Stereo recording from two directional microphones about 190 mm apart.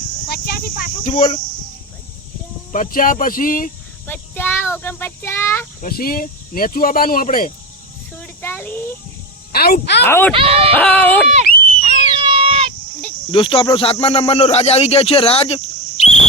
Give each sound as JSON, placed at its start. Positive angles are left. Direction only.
{"t": 0.3, "sound": "speech", "side_deg": 55}
{"t": 1.0, "sound": "speech", "side_deg": 40}
{"t": 2.7, "sound": "speech", "side_deg": 45}
{"t": 4.0, "sound": "speech", "side_deg": 10}
{"t": 5.8, "sound": "speech", "side_deg": 50}
{"t": 8.1, "sound": "a sound", "side_deg": 10}
{"t": 9.5, "sound": "speech", "side_deg": 55}
{"t": 10.0, "sound": "speech", "side_deg": 10}
{"t": 10.3, "sound": "speech", "side_deg": -30}
{"t": 10.8, "sound": "speech", "side_deg": 5}
{"t": 11.8, "sound": "a sound", "side_deg": -30}
{"t": 13.3, "sound": "speech", "side_deg": 25}